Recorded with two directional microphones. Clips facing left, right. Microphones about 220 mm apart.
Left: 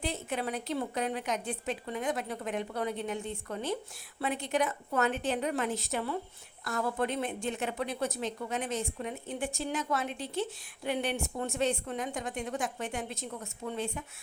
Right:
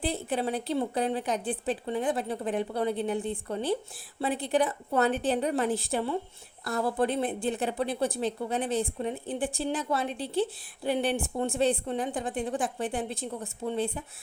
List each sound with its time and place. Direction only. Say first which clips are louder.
0.0 s a woman's voice: right 5 dB; 35° right (ahead or behind)